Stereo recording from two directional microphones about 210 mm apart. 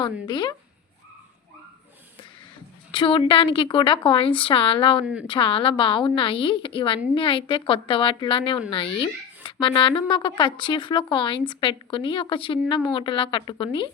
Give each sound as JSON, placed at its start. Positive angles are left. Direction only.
{"t": 0.0, "sound": "speech", "side_deg": 20}
{"t": 2.9, "sound": "speech", "side_deg": 25}